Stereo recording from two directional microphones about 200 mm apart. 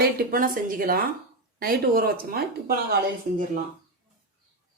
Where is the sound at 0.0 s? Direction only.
50° right (ahead or behind).